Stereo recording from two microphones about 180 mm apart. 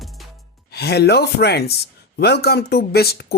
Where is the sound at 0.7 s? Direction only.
65° left (ahead or behind).